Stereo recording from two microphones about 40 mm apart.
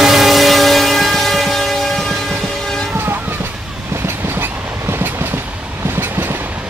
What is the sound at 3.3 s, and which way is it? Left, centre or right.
Train, right.